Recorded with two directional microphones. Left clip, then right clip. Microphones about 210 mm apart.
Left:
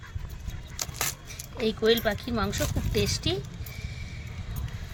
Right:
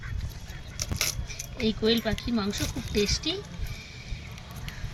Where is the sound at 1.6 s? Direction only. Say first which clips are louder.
Left 2 dB; 60° left (ahead or behind).